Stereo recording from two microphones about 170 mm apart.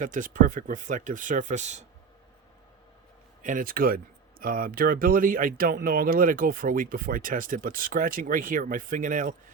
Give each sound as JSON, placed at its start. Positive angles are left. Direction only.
{"t": 0.0, "sound": "speech", "side_deg": -50}
{"t": 3.4, "sound": "speech", "side_deg": -50}